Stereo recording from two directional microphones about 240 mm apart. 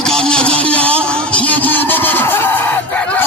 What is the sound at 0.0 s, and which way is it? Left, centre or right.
Music, centre.